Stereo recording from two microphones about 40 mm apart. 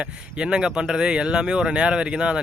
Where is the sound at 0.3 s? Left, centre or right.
Right.